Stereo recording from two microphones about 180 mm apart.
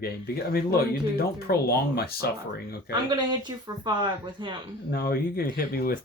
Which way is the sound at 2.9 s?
25° right (ahead or behind).